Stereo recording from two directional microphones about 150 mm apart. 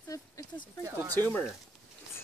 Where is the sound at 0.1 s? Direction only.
20° left (ahead or behind).